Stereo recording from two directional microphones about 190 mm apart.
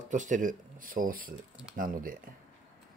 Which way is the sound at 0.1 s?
40° right (ahead or behind).